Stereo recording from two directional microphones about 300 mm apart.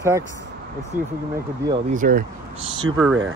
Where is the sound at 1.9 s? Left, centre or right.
Right.